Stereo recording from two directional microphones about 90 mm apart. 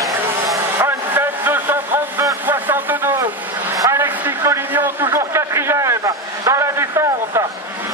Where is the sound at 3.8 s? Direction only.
35° right (ahead or behind).